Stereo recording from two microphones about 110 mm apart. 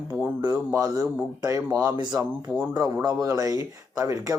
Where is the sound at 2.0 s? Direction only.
40° right (ahead or behind).